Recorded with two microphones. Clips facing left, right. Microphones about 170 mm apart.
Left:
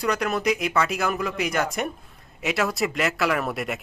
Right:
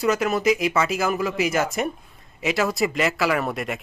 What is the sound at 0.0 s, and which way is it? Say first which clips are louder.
Speech: right 3 dB; centre (ahead or behind).